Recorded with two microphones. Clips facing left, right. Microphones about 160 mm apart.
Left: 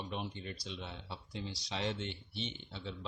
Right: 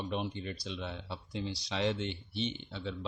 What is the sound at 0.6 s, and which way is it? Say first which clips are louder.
Speech: right 5 dB; 75° right (ahead or behind).